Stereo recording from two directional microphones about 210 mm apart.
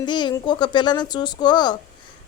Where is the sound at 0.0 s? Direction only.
20° left (ahead or behind).